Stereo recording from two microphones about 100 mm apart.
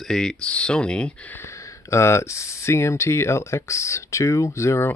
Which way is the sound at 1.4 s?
30° left (ahead or behind).